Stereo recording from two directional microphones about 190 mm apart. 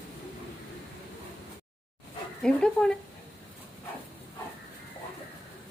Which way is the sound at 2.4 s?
5° left (ahead or behind).